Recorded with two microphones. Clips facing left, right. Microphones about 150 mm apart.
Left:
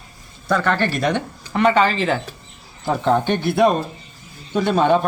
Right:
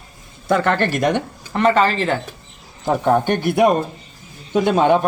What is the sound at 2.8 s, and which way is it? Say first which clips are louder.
A man's voice: right 2 dB; 15° right (ahead or behind).